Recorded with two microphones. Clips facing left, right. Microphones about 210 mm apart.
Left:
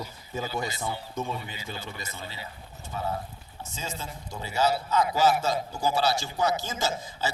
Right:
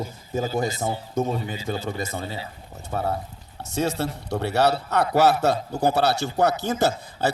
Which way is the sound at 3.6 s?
70° right (ahead or behind).